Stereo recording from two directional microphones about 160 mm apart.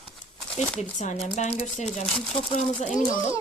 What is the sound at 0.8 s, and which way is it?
Speech, 45° left (ahead or behind).